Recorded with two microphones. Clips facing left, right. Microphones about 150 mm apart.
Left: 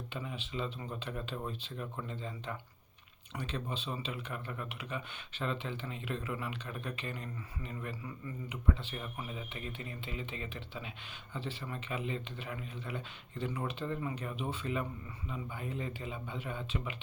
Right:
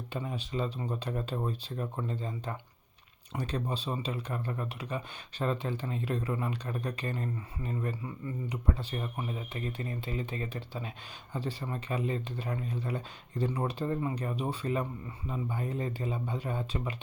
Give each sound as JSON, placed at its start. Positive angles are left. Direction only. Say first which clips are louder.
{"t": 0.1, "sound": "speech", "louder": "right 7 dB", "side_deg": -40}